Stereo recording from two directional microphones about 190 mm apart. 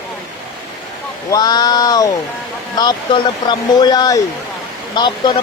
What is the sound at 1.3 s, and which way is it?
Speech, 20° left (ahead or behind).